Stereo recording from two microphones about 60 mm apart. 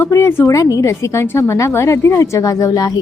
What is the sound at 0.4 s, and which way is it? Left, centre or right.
A woman's voice, left.